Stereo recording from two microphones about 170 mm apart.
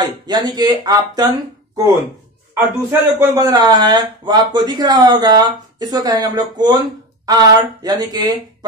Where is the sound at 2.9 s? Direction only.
15° right (ahead or behind).